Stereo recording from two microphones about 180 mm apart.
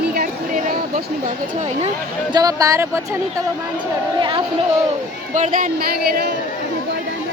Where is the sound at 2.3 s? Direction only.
20° right (ahead or behind).